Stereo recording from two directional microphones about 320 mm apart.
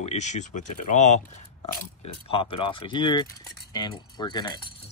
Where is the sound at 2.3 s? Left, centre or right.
Centre.